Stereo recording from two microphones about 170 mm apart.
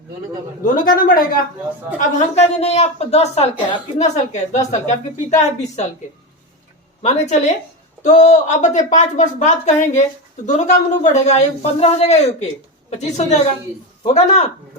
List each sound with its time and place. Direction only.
0.6 s speech: 55° left (ahead or behind)
2.0 s a woman's voice: 40° left (ahead or behind)
7.0 s a woman's voice: 45° left (ahead or behind)